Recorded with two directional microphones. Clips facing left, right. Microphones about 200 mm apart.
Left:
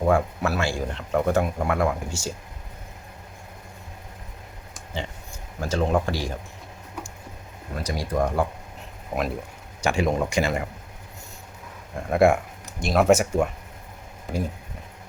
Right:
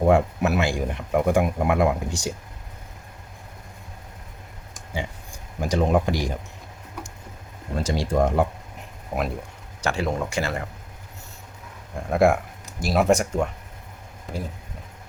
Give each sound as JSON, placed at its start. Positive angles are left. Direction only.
{"t": 0.1, "sound": "speech", "side_deg": -20}
{"t": 4.9, "sound": "speech", "side_deg": -15}
{"t": 7.8, "sound": "speech", "side_deg": -25}
{"t": 9.1, "sound": "speech", "side_deg": -5}
{"t": 9.8, "sound": "speech", "side_deg": 15}
{"t": 11.9, "sound": "speech", "side_deg": 0}